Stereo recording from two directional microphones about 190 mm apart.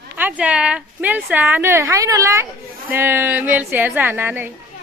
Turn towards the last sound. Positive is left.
turn(degrees=-10)  # may be behind; listen again after turning